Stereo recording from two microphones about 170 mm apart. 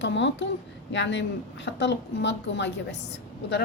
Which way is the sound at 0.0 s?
90° left.